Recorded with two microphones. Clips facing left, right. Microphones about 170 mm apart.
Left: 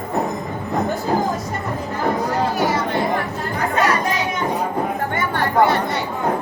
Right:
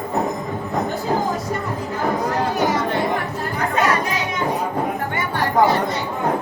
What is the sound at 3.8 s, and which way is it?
Chatter, 40° left (ahead or behind).